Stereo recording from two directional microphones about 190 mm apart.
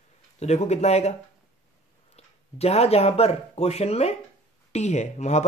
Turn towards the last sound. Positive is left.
turn(degrees=35)  # may be behind; listen again after turning